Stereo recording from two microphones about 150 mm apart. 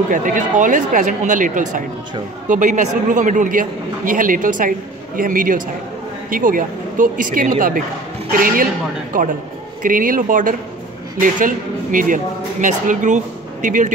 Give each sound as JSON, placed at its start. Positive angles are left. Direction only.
{"t": 0.1, "sound": "a man's voice", "side_deg": -60}